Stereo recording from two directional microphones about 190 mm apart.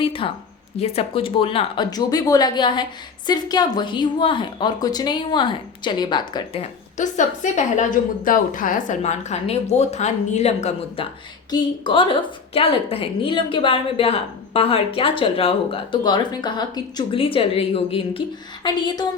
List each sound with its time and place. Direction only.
0.0 s a woman's voice: 30° left (ahead or behind)